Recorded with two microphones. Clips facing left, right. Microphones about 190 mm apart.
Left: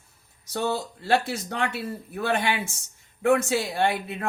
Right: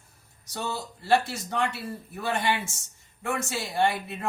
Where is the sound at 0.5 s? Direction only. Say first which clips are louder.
Left 6 dB; 60° left (ahead or behind).